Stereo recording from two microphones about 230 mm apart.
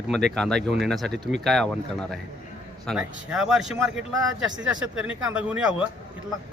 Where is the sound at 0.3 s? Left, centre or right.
Centre.